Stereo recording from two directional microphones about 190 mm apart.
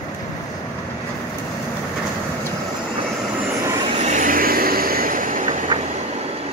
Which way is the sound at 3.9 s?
40° right (ahead or behind).